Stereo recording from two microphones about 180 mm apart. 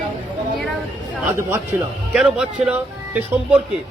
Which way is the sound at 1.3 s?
15° right (ahead or behind).